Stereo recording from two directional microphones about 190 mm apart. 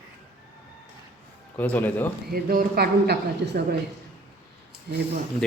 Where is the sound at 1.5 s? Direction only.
10° left (ahead or behind).